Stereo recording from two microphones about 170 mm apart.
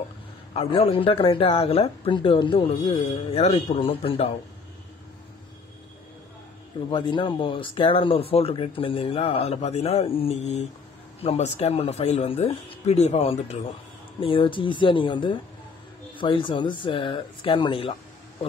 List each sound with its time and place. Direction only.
0.5 s speech: 35° left (ahead or behind)
6.9 s speech: 30° left (ahead or behind)